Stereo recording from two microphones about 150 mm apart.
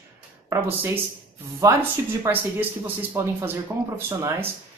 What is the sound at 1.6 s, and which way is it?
Speech, 20° right (ahead or behind).